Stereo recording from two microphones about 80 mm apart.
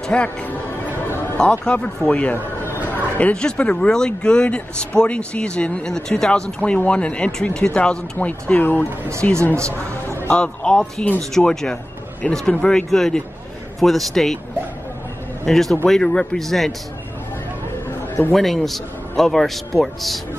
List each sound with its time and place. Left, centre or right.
0.0 s speech: centre
1.0 s music: left
1.4 s speech: centre
2.3 s speech: left; by 14.4 s centre
15.4 s speech: centre
18.3 s speech: centre